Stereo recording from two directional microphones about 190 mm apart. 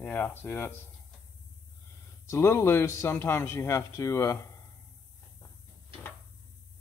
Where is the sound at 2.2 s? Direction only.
15° left (ahead or behind).